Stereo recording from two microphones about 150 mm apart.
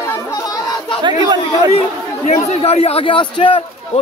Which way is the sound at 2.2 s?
55° left (ahead or behind).